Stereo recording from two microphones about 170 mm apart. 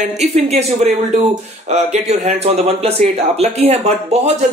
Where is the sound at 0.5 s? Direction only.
40° right (ahead or behind).